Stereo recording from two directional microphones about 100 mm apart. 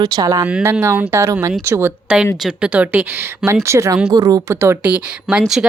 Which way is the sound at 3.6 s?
30° right (ahead or behind).